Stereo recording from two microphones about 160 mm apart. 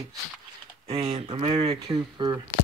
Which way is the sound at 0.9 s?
40° right (ahead or behind).